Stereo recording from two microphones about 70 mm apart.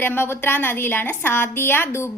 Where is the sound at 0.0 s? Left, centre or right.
Left.